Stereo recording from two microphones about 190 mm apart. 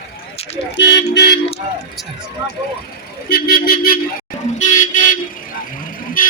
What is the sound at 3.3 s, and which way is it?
Speech, 55° left (ahead or behind).